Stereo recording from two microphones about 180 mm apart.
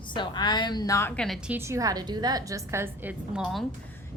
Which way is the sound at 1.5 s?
15° right (ahead or behind).